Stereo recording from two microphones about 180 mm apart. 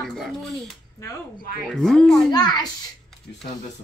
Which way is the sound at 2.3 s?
25° left (ahead or behind).